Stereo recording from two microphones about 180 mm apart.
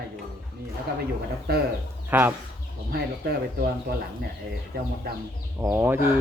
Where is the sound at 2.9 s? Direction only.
60° right (ahead or behind).